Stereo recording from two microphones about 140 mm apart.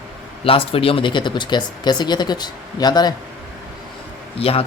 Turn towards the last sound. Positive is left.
turn(degrees=45)  # may be behind; listen again after turning